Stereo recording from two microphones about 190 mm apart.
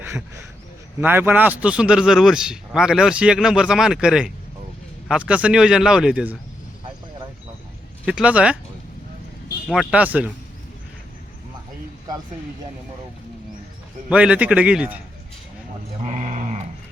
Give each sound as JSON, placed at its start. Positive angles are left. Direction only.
{"t": 1.0, "sound": "speech", "side_deg": -10}
{"t": 8.0, "sound": "speech", "side_deg": -5}
{"t": 9.6, "sound": "a man's voice", "side_deg": -5}
{"t": 14.1, "sound": "a man's voice", "side_deg": -5}
{"t": 16.0, "sound": "sheep", "side_deg": -40}